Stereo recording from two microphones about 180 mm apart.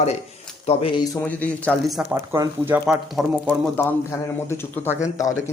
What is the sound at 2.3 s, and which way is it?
Speech, 15° right (ahead or behind).